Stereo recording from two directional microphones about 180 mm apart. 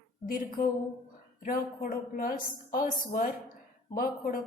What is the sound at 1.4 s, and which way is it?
A woman's voice, 50° left (ahead or behind).